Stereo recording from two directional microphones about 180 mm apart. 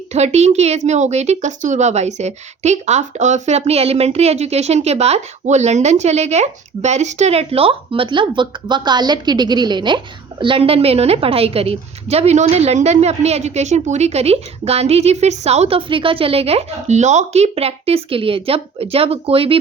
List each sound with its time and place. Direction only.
0.1 s speech: 40° right (ahead or behind)